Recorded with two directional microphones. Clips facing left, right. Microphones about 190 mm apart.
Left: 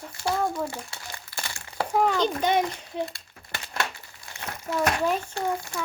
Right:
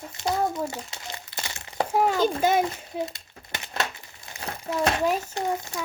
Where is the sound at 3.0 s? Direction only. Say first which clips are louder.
Right 1 dB; 20° right (ahead or behind).